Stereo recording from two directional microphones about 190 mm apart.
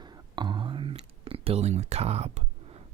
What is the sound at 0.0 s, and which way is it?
Whispering, 25° right (ahead or behind).